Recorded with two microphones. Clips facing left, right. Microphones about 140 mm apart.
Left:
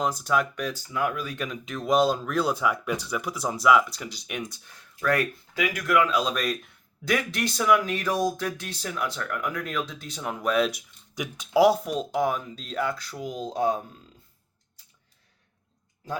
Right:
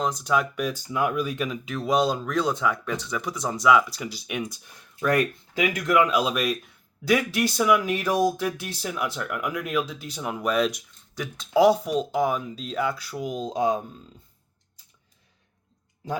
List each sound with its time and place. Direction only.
0.0 s speech: centre (ahead or behind)
0.5 s speech: 15° right (ahead or behind)
4.9 s speech: 20° right (ahead or behind)
6.1 s speech: 10° right (ahead or behind)
11.1 s speech: 15° left (ahead or behind); by 13.8 s 15° right (ahead or behind)